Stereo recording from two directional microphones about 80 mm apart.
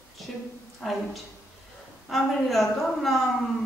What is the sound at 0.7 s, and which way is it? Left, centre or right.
Speech, centre.